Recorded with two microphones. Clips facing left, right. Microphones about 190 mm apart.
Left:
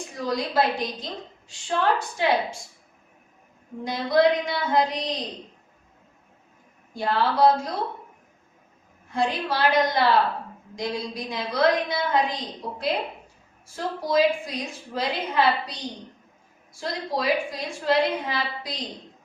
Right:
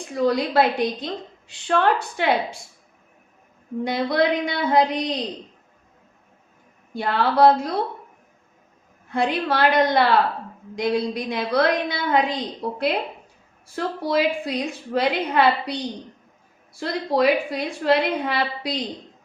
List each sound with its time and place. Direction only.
0.1 s a woman's voice: 60° right (ahead or behind)
3.8 s a woman's voice: 65° right (ahead or behind)
6.9 s a woman's voice: 65° right (ahead or behind)
9.0 s a woman's voice: 60° right (ahead or behind)
13.7 s a woman's voice: 65° right (ahead or behind)